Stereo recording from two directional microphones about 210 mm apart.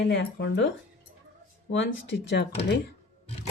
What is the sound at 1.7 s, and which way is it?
Speech, 60° left (ahead or behind).